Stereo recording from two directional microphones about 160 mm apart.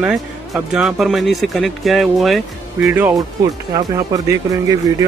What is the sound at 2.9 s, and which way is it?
Speech, 15° right (ahead or behind).